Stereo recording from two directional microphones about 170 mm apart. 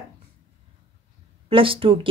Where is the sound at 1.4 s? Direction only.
30° right (ahead or behind).